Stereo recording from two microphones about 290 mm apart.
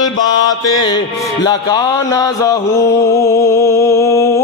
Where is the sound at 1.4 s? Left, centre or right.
Centre.